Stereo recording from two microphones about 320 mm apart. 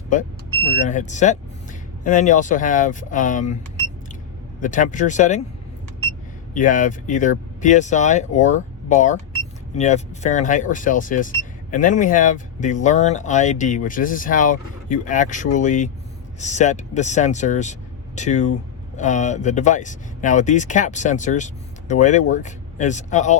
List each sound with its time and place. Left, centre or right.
0.1 s speech: left
4.6 s speech: left
6.5 s speech: left